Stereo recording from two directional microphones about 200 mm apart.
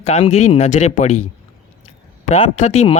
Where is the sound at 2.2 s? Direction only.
35° left (ahead or behind).